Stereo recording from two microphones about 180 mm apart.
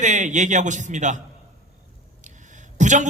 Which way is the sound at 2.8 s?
45° right (ahead or behind).